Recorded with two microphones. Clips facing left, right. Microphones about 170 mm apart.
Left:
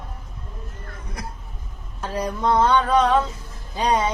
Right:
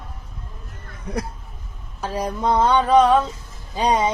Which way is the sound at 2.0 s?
10° right (ahead or behind).